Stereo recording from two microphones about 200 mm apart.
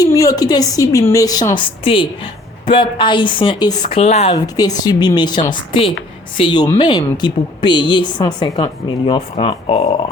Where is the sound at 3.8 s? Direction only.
35° left (ahead or behind).